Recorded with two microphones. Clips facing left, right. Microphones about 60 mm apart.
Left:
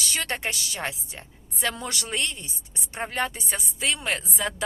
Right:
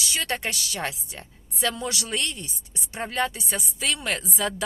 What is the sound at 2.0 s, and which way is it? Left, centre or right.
Speech, left.